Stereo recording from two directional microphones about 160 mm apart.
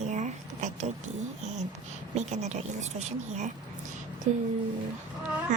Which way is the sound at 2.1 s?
45° right (ahead or behind).